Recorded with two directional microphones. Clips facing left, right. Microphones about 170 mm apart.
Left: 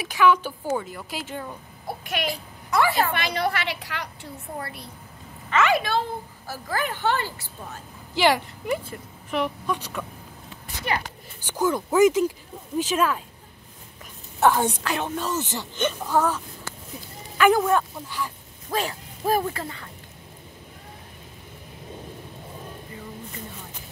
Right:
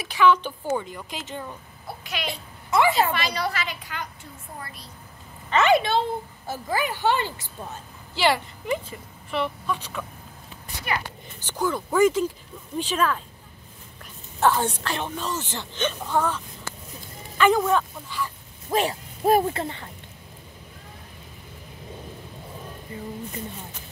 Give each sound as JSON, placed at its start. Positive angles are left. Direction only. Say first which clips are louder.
{"t": 0.0, "sound": "speech", "louder": "even", "side_deg": 10}
{"t": 2.2, "sound": "a woman's voice", "louder": "left 3 dB", "side_deg": -20}
{"t": 3.1, "sound": "a woman's voice", "louder": "left 1 dB", "side_deg": 55}
{"t": 5.5, "sound": "a woman's voice", "louder": "right 2 dB", "side_deg": -30}
{"t": 8.1, "sound": "speech", "louder": "left 2 dB", "side_deg": 10}
{"t": 11.4, "sound": "speech", "louder": "left 2 dB", "side_deg": 10}
{"t": 14.4, "sound": "speech", "louder": "left 2 dB", "side_deg": 10}
{"t": 18.7, "sound": "a woman's voice", "louder": "right 4 dB", "side_deg": -20}